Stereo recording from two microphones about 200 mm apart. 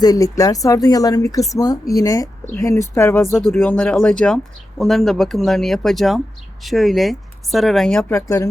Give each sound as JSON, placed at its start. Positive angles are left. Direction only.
{"t": 0.0, "sound": "speech", "side_deg": 15}
{"t": 8.1, "sound": "speech", "side_deg": 15}